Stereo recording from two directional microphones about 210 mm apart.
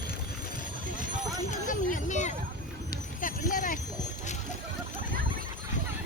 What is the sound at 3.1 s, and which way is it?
Clip-clop, 40° left (ahead or behind).